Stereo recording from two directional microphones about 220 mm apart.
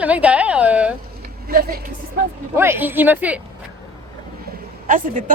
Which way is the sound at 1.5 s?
45° right (ahead or behind).